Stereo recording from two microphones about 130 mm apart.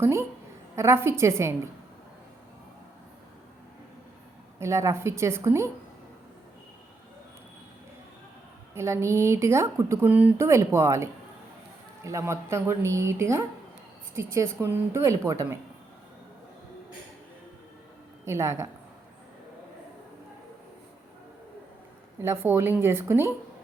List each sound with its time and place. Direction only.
0.0 s speech: 20° right (ahead or behind)
4.6 s speech: 20° right (ahead or behind)
8.7 s speech: 20° right (ahead or behind)
18.3 s speech: 20° right (ahead or behind)
22.2 s speech: 20° right (ahead or behind)